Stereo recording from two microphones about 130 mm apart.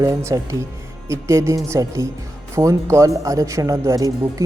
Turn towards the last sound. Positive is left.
turn(degrees=-25)  # may be behind; listen again after turning